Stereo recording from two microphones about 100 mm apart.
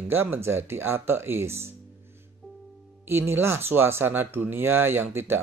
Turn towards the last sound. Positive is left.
turn(degrees=-25)  # may be behind; listen again after turning